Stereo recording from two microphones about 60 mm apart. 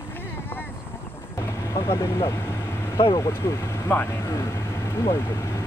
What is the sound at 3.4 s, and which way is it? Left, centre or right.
Speech, left.